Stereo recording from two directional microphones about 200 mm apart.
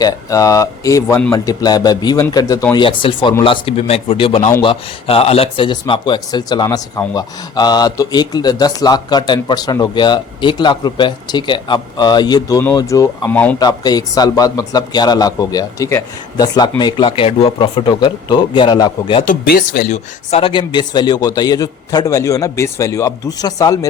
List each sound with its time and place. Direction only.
0.0 s speech: 15° left (ahead or behind)
13.6 s speech: 20° left (ahead or behind)
19.2 s speech: 45° left (ahead or behind); by 23.7 s 20° left (ahead or behind)